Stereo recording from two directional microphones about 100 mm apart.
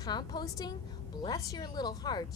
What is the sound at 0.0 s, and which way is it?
A woman's voice, 45° left (ahead or behind).